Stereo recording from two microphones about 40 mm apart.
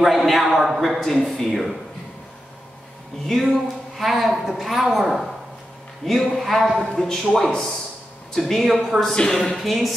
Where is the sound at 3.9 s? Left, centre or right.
Centre.